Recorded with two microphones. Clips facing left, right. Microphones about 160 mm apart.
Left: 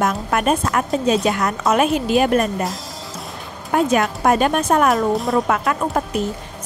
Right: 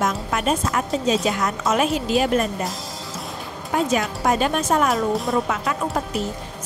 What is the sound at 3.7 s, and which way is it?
Speech, 60° left (ahead or behind).